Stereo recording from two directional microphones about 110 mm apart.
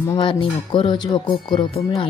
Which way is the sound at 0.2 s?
50° left (ahead or behind).